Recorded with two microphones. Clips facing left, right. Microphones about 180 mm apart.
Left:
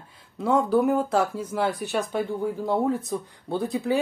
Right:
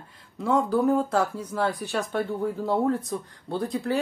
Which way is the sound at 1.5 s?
15° left (ahead or behind).